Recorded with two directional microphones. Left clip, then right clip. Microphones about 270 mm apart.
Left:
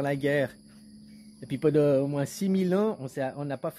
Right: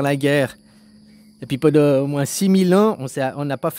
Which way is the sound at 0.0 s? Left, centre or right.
Right.